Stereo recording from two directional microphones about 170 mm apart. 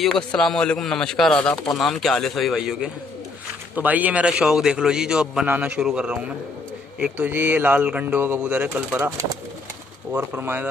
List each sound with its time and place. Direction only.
0.0 s a man's voice: 5° left (ahead or behind)